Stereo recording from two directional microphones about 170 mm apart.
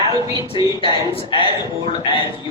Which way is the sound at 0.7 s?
30° left (ahead or behind).